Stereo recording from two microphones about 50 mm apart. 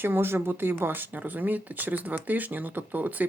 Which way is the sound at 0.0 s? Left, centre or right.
Right.